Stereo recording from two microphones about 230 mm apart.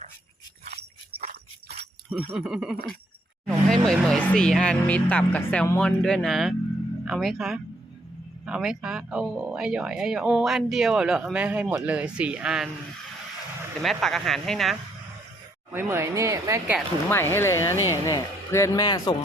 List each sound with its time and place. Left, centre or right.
1.2 s jingle bell: right
2.0 s speech: centre
13.8 s speech: centre
15.7 s speech: centre
17.1 s a man's voice: centre